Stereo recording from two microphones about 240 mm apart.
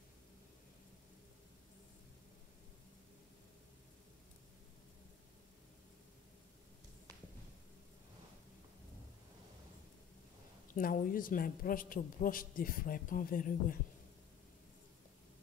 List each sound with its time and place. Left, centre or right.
10.7 s a woman's voice: left